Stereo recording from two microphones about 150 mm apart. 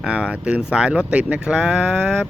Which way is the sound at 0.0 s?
5° right (ahead or behind).